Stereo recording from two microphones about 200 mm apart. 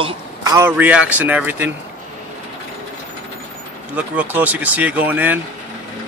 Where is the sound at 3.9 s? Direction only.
10° right (ahead or behind).